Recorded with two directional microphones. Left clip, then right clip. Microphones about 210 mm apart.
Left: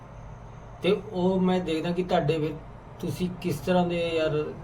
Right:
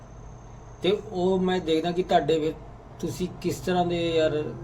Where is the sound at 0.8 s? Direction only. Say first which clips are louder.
Right 1 dB; 20° right (ahead or behind).